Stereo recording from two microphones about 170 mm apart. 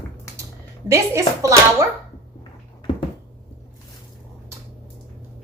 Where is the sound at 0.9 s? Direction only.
20° right (ahead or behind).